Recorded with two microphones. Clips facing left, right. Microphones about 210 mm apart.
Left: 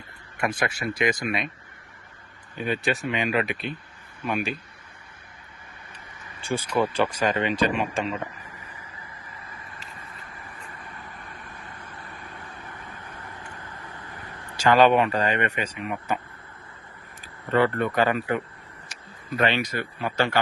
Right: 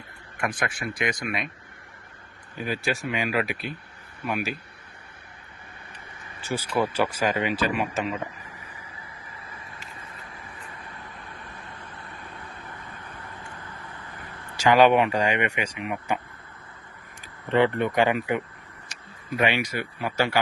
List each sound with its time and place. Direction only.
0.4 s speech: 25° left (ahead or behind)
2.8 s speech: centre (ahead or behind)
6.5 s a man's voice: 10° right (ahead or behind)
12.5 s vehicle: 15° left (ahead or behind)
14.6 s a man's voice: 10° right (ahead or behind)
17.5 s a man's voice: 15° right (ahead or behind)